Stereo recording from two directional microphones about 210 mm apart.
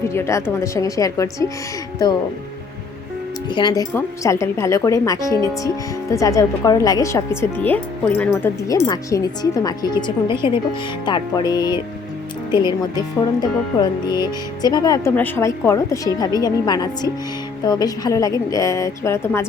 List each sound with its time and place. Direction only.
0.0 s speech: 15° left (ahead or behind)
3.5 s speech: 20° left (ahead or behind)